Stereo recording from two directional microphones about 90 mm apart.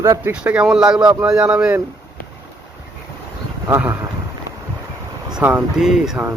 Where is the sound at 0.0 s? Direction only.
30° right (ahead or behind).